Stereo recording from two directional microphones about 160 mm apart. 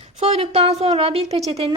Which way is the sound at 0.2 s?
40° right (ahead or behind).